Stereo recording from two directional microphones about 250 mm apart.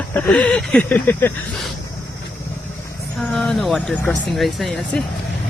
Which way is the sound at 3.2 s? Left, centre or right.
Centre.